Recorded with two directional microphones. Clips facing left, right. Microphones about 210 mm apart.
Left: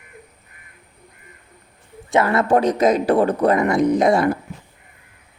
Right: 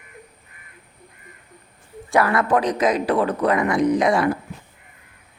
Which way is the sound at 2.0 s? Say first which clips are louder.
Left 2 dB; 25° left (ahead or behind).